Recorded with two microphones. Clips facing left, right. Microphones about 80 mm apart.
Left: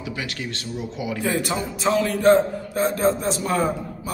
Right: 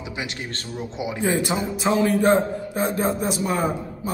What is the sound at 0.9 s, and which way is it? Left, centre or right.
A man's voice, right.